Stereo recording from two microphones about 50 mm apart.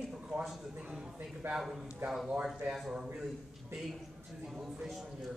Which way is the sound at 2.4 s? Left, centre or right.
Centre.